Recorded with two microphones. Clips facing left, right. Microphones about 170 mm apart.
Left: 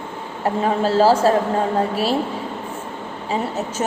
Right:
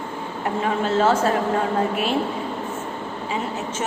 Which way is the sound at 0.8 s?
35° left (ahead or behind).